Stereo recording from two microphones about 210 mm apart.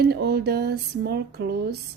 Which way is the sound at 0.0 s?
50° right (ahead or behind).